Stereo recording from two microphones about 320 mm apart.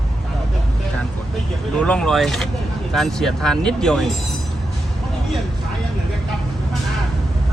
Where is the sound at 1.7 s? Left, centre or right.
Centre.